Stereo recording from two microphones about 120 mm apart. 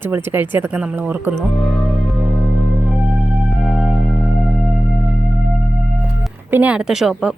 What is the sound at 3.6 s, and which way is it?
Music, centre (ahead or behind).